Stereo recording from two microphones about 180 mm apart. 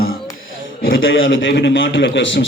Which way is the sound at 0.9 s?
90° left.